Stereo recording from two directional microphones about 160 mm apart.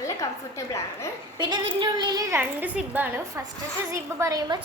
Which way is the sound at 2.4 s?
10° right (ahead or behind).